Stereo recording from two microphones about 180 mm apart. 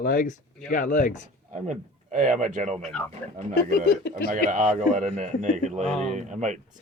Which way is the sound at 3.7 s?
65° left (ahead or behind).